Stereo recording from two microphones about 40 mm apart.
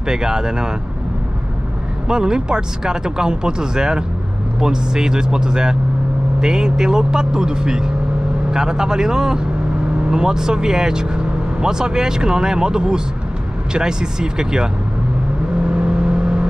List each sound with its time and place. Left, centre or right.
0.1 s speech: centre
2.0 s speech: centre
15.7 s vehicle: right